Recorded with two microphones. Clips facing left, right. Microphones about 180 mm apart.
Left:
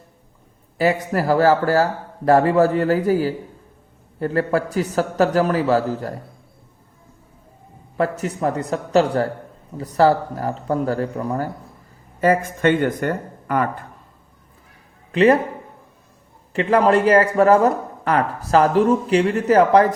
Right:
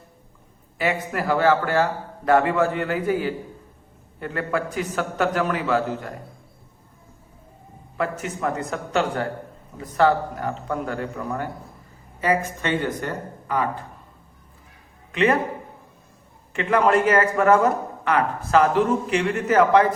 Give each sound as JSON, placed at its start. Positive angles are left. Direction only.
{"t": 0.8, "sound": "speech", "side_deg": 35}
{"t": 7.9, "sound": "speech", "side_deg": 35}
{"t": 12.2, "sound": "speech", "side_deg": 50}
{"t": 15.1, "sound": "a man's voice", "side_deg": 35}
{"t": 16.5, "sound": "speech", "side_deg": 35}